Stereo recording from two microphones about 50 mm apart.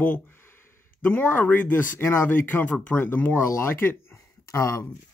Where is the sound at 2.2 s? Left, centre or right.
Left.